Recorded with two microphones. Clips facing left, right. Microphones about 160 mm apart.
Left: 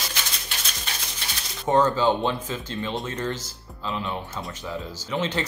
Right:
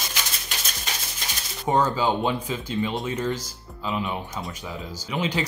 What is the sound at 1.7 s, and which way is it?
Speech, 10° right (ahead or behind).